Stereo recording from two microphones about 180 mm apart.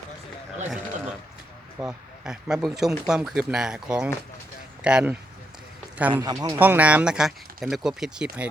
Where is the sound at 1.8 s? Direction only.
5° right (ahead or behind).